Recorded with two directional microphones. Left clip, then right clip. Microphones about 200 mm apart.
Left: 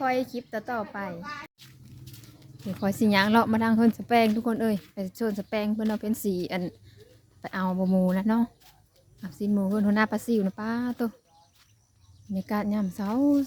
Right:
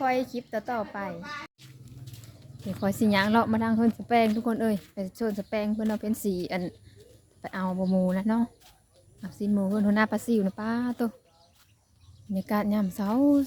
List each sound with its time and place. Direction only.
0.0 s a woman's voice: 5° left (ahead or behind)
12.3 s a woman's voice: 5° right (ahead or behind)